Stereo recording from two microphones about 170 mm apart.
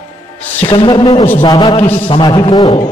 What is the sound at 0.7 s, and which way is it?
A man's voice, 25° left (ahead or behind).